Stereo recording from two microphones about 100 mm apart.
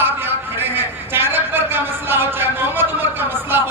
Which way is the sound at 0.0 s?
20° right (ahead or behind).